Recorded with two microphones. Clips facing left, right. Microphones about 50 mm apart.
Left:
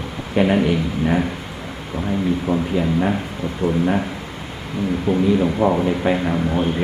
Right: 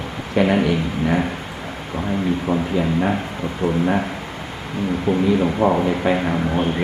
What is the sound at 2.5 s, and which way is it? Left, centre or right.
A man's voice, centre.